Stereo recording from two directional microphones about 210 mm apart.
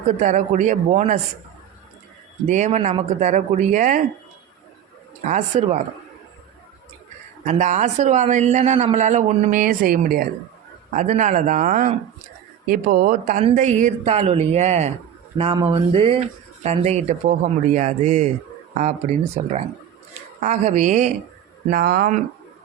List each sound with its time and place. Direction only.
0.1 s a man's voice: 35° right (ahead or behind)
2.5 s a man's voice: 35° right (ahead or behind)
5.2 s a man's voice: 35° right (ahead or behind)
7.4 s a man's voice: 35° right (ahead or behind)
15.4 s a sound: 25° right (ahead or behind)
16.6 s a man's voice: 30° right (ahead or behind)
20.4 s a man's voice: 35° right (ahead or behind)